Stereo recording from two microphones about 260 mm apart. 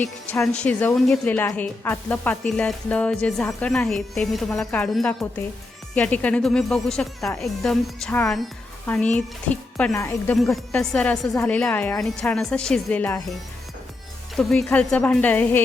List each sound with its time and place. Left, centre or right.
0.3 s speech: centre
14.3 s speech: centre